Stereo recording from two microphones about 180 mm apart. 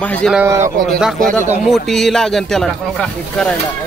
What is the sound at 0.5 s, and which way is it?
Speech, 45° right (ahead or behind).